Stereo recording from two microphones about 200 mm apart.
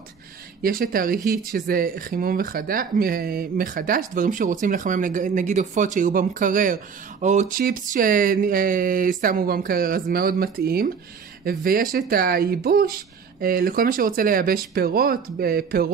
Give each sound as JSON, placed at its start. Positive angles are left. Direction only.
{"t": 0.6, "sound": "speech", "side_deg": -45}